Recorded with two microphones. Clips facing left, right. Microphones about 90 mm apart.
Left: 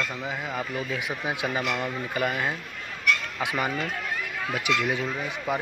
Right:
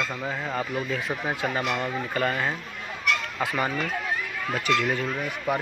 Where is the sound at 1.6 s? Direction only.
Centre (ahead or behind).